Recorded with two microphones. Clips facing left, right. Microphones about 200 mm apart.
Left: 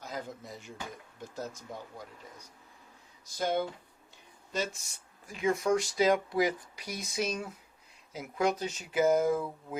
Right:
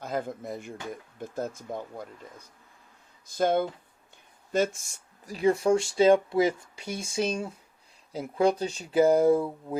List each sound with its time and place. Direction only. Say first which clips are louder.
0.0 s speech: right 8 dB; 55° right (ahead or behind)
3.2 s speech: right 6 dB; 55° right (ahead or behind); by 9.7 s 35° right (ahead or behind)